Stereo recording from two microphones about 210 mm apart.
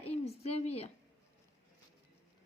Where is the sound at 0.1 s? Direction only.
30° left (ahead or behind).